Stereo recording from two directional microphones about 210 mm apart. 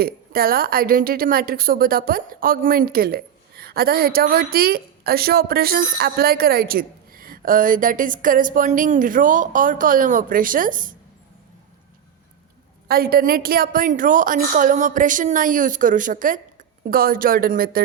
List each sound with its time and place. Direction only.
0.0 s a woman's voice: 45° right (ahead or behind)
12.9 s a woman's voice: 45° right (ahead or behind)